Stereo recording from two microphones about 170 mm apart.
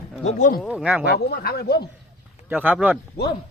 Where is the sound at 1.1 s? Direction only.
65° left (ahead or behind).